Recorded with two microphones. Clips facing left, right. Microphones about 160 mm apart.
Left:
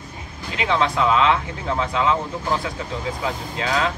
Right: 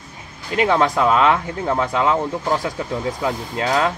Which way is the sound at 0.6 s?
45° right (ahead or behind).